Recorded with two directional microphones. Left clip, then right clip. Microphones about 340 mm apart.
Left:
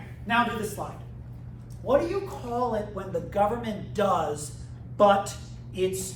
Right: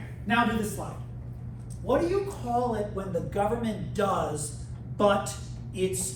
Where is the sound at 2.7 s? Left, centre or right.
Centre.